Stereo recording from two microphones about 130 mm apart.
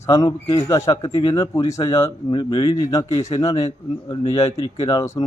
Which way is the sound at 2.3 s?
35° left (ahead or behind).